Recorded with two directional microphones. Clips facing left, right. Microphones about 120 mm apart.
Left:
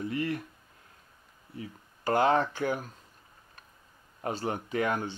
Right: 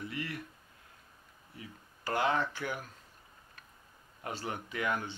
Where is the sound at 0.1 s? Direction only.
35° left (ahead or behind).